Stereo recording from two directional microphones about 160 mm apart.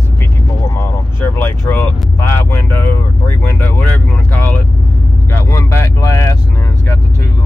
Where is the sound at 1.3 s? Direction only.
15° left (ahead or behind).